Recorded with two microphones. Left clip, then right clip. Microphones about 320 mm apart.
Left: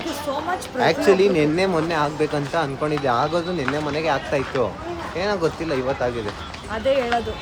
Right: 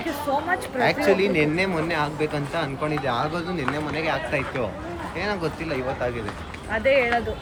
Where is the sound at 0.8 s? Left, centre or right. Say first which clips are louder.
Left 4 dB; centre.